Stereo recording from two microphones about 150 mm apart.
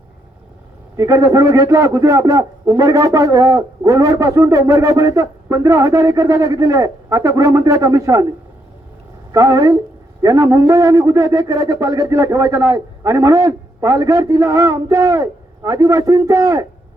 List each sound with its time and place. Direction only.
0.9 s a man's voice: 20° right (ahead or behind)
9.3 s a man's voice: 20° right (ahead or behind)